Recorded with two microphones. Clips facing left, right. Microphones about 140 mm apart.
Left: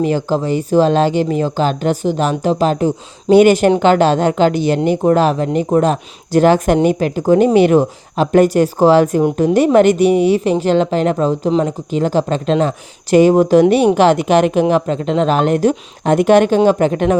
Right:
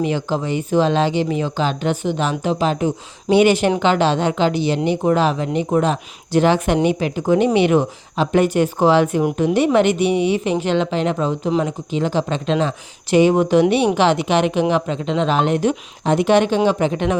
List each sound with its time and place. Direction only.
0.0 s a woman's voice: 40° left (ahead or behind)